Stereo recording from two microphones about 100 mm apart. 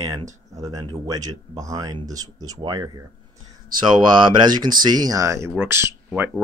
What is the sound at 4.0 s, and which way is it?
Speech, 45° right (ahead or behind).